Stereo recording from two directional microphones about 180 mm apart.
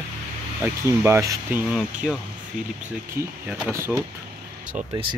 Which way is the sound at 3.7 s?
15° right (ahead or behind).